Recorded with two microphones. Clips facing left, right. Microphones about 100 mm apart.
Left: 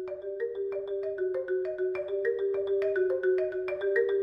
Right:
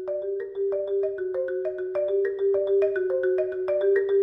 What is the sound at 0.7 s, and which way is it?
Music, 35° right (ahead or behind).